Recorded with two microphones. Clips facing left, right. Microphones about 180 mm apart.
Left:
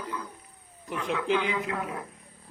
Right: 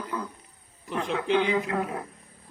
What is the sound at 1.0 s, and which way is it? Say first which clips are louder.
A man's voice: right 2 dB; 35° right (ahead or behind).